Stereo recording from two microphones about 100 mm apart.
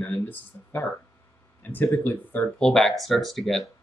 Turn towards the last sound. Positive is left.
turn(degrees=0)  # may be behind; listen again after turning